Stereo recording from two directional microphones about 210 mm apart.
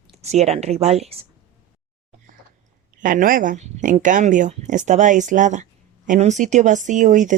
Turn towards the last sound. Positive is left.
turn(degrees=-35)  # may be behind; listen again after turning